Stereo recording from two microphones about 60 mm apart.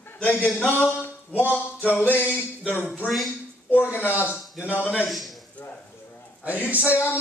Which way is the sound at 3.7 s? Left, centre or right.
Left.